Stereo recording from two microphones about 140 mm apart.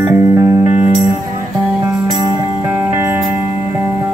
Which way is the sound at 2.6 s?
20° right (ahead or behind).